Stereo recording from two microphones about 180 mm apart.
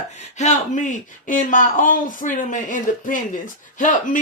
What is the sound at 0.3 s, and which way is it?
Speech, 40° left (ahead or behind).